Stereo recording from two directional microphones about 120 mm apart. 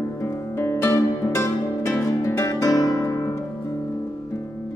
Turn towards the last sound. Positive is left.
turn(degrees=25)  # may be behind; listen again after turning